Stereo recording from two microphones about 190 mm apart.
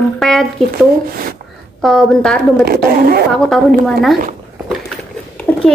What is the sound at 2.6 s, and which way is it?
Speech, 50° right (ahead or behind).